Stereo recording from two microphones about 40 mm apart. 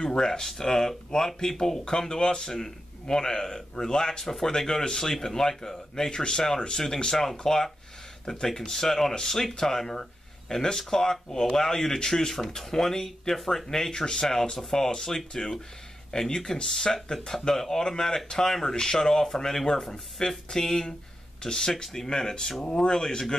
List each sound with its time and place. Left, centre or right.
0.0 s speech: centre